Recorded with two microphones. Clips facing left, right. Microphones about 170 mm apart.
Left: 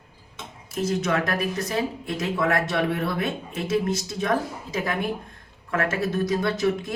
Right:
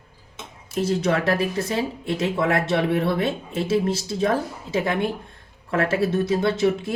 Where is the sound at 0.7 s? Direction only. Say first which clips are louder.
Right 3 dB; 30° right (ahead or behind).